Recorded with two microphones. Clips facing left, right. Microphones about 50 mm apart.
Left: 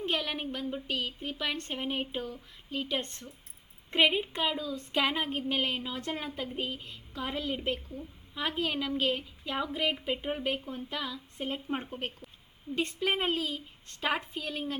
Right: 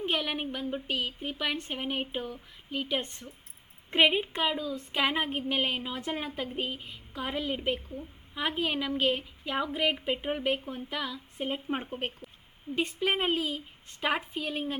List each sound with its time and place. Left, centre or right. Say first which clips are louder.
0.0 s a woman's voice: right 2 dB; right
2.2 s a sound: right 1 dB; right
2.9 s a woman's voice: right 2 dB; centre
4.7 s a woman's voice: right 1 dB; centre
6.6 s a sound: right 1 dB; right
7.1 s a woman's voice: right 1 dB; right
9.7 s a sound: right 3 dB; right
10.1 s a woman's voice: right 2 dB; centre; by 10.9 s right
10.9 s a woman's voice: right 3 dB; centre
12.7 s a woman's voice: right 1 dB; right
13.0 s a woman's voice: right 1 dB; right
13.2 s a woman's voice: right 2 dB; centre